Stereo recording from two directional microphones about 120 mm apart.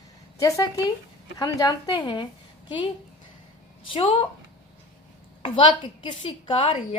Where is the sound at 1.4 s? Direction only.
35° left (ahead or behind).